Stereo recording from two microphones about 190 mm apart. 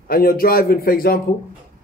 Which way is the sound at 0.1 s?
50° left (ahead or behind).